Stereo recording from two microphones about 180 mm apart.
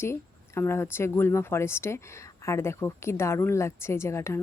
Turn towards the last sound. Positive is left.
turn(degrees=15)  # may be behind; listen again after turning